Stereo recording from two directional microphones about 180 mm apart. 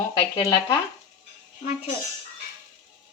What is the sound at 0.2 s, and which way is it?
Speech, 25° left (ahead or behind).